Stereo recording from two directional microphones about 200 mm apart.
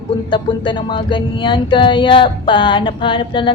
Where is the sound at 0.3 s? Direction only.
25° left (ahead or behind).